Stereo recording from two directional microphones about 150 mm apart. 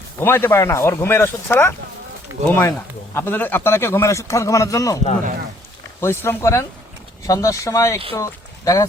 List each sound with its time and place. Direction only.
0.2 s a man's voice: 15° left (ahead or behind)
6.0 s a man's voice: 15° left (ahead or behind)